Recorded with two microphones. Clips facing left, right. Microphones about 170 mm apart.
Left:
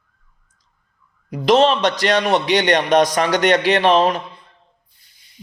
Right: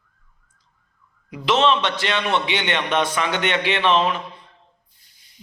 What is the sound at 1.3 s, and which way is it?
A man's voice, 40° left (ahead or behind).